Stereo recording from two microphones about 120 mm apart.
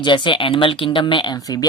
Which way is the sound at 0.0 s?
40° left (ahead or behind).